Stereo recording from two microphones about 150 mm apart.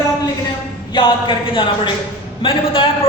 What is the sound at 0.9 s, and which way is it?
A man's voice, 30° left (ahead or behind).